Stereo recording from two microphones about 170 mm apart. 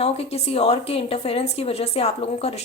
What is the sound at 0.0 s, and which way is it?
Speech, 35° left (ahead or behind).